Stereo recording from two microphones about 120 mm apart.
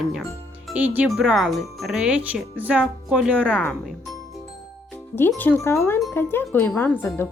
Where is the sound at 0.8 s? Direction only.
15° right (ahead or behind).